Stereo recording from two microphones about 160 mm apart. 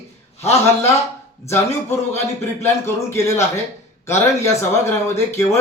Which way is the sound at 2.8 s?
15° left (ahead or behind).